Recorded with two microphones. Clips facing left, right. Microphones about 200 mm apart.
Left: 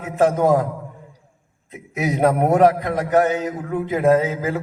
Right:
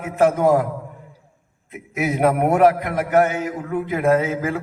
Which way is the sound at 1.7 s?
20° left (ahead or behind).